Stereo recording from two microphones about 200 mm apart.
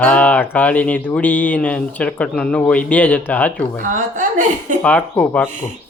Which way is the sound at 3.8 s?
40° right (ahead or behind).